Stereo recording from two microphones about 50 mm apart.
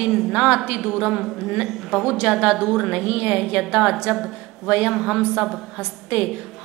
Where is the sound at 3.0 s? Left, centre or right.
Right.